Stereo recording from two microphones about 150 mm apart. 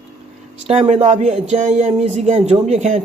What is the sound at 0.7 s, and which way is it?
Speech, 45° right (ahead or behind).